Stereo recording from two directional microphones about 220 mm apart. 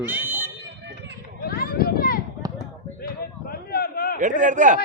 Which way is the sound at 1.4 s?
45° left (ahead or behind).